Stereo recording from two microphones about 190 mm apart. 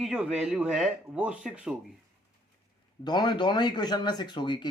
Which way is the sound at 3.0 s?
20° left (ahead or behind).